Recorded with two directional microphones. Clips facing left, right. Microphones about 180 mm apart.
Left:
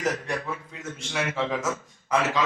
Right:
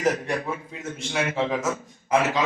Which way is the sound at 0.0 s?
20° right (ahead or behind).